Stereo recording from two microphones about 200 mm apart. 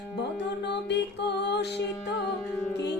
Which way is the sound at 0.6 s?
60° left (ahead or behind).